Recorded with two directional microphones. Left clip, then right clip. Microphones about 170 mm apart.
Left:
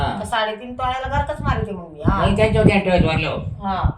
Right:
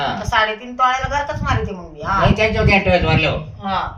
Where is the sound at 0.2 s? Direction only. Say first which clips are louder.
Right 4 dB; centre (ahead or behind).